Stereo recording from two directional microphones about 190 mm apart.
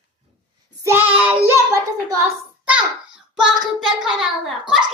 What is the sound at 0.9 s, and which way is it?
Child singing, 10° right (ahead or behind).